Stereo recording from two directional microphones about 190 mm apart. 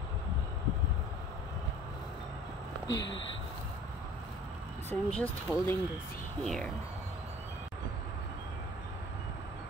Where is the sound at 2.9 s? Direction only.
70° left (ahead or behind).